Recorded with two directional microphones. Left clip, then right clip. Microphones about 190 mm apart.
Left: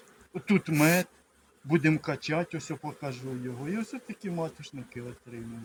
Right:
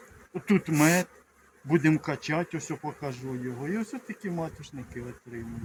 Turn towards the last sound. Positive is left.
turn(degrees=15)  # may be behind; listen again after turning